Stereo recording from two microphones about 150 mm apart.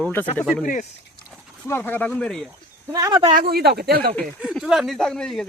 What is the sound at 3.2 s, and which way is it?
Speech, 60° right (ahead or behind).